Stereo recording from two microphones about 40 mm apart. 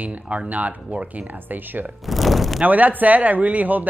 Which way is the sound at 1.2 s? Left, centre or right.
Right.